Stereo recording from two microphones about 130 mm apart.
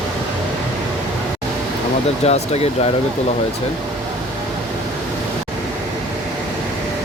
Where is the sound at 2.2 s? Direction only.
55° left (ahead or behind).